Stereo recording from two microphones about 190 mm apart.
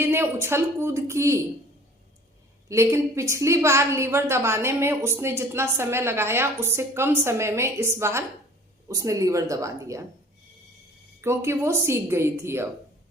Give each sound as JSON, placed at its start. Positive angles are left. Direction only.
{"t": 0.0, "sound": "a woman's voice", "side_deg": -10}
{"t": 2.6, "sound": "a woman's voice", "side_deg": -15}
{"t": 11.2, "sound": "a woman's voice", "side_deg": -15}